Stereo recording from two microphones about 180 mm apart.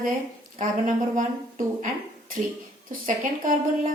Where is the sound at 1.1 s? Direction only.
45° right (ahead or behind).